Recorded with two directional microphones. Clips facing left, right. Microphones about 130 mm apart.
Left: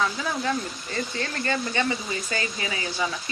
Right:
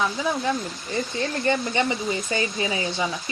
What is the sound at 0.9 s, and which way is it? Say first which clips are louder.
Speech: right 4 dB; 20° right (ahead or behind).